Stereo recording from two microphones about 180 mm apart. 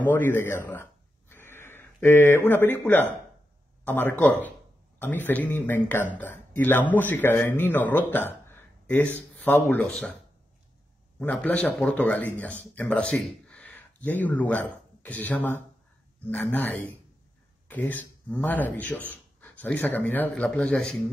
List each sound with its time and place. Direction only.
0.0 s speech: 10° left (ahead or behind)
1.3 s a sound: 10° left (ahead or behind)
3.8 s speech: 10° left (ahead or behind)
11.1 s speech: 10° left (ahead or behind)